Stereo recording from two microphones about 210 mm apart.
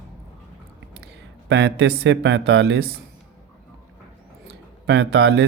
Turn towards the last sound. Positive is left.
turn(degrees=-55)  # may be behind; listen again after turning